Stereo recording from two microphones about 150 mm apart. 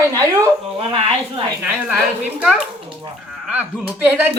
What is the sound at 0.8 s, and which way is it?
Speech, 40° right (ahead or behind).